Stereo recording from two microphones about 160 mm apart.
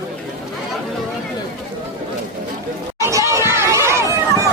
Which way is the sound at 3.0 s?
20° right (ahead or behind).